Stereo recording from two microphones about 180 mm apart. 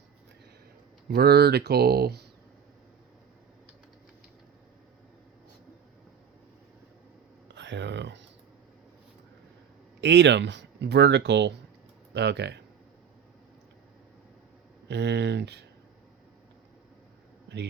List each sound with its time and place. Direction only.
1.0 s speech: 60° right (ahead or behind)
7.4 s a sound: 85° right
10.0 s speech: 70° right (ahead or behind)
14.8 s speech: 70° right (ahead or behind)